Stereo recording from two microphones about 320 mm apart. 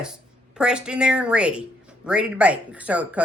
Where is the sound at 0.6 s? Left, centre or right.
Centre.